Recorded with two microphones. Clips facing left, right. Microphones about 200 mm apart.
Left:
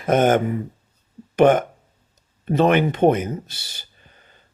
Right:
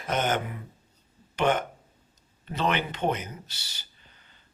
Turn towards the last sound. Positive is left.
turn(degrees=50)  # may be behind; listen again after turning